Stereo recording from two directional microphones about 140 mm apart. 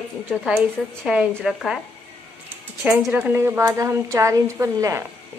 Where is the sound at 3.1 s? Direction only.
15° right (ahead or behind).